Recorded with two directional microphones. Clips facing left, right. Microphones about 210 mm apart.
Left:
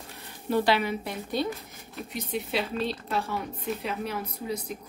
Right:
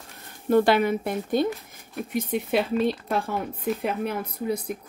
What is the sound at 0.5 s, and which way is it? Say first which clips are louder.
Speech: right 5 dB; 50° right (ahead or behind).